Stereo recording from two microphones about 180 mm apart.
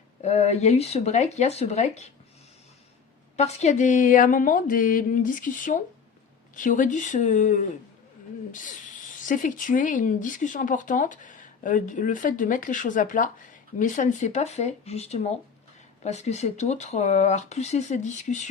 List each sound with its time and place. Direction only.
0.2 s speech: 40° left (ahead or behind)
3.3 s speech: 35° left (ahead or behind)
9.2 s speech: 45° left (ahead or behind)